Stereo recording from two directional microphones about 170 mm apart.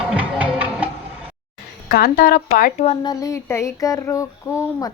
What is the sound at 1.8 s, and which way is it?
Speech, 60° left (ahead or behind).